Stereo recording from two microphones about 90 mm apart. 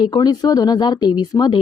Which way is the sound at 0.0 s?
50° left (ahead or behind).